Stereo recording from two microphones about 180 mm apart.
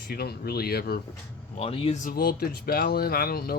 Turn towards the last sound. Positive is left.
turn(degrees=60)  # may be behind; listen again after turning